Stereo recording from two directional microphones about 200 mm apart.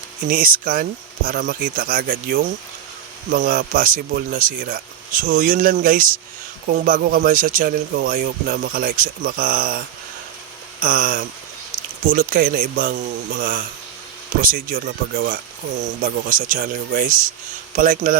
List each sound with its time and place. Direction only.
0.3 s speech: 45° right (ahead or behind)